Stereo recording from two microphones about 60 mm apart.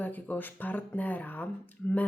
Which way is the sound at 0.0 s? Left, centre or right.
Left.